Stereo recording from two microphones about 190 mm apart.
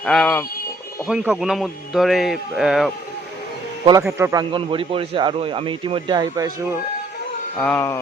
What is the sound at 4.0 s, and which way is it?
Speech, 15° right (ahead or behind).